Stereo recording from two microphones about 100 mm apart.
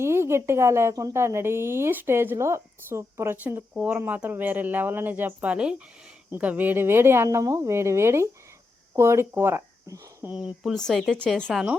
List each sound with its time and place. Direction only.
0.0 s a woman's voice: 25° right (ahead or behind)
10.3 s speech: 5° right (ahead or behind)
11.5 s speech: 5° right (ahead or behind)